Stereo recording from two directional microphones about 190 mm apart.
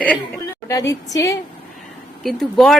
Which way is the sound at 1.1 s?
20° left (ahead or behind).